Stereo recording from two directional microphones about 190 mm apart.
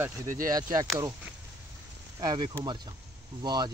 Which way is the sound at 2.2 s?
20° right (ahead or behind).